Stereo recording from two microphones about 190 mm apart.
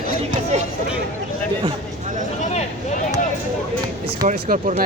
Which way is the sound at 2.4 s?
40° left (ahead or behind).